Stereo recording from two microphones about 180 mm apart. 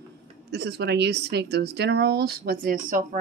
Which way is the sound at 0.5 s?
70° right (ahead or behind).